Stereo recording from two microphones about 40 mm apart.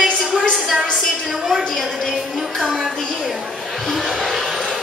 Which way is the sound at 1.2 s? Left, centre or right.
Centre.